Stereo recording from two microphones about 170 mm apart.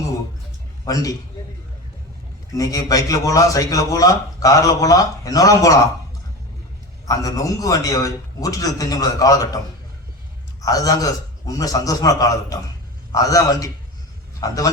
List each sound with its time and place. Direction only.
0.9 s a man's voice: 20° left (ahead or behind)
2.6 s a man's voice: 20° left (ahead or behind)
7.0 s a man's voice: 20° left (ahead or behind)
10.7 s a man's voice: 20° left (ahead or behind)